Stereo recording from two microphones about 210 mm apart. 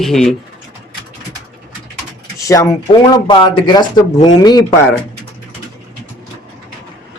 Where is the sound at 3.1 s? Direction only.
20° left (ahead or behind).